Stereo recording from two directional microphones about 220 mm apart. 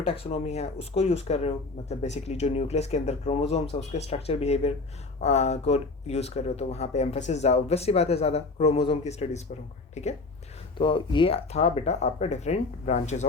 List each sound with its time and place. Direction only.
0.0 s speech: 25° left (ahead or behind)